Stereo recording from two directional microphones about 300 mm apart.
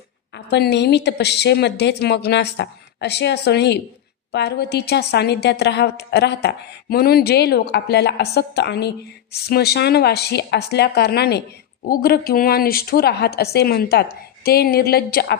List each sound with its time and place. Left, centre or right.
0.3 s a woman's voice: left